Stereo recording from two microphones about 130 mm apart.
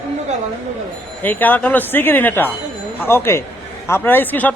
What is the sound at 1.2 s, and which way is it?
A man's voice, 15° left (ahead or behind).